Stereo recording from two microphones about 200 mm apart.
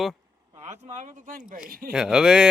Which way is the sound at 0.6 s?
35° right (ahead or behind).